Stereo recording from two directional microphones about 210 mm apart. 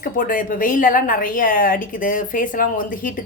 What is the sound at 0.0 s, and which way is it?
A woman's voice, 40° left (ahead or behind).